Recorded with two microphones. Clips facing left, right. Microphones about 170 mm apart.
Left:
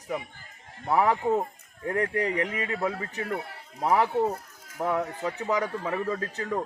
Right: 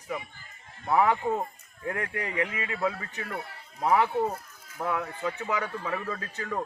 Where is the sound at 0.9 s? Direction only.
35° left (ahead or behind).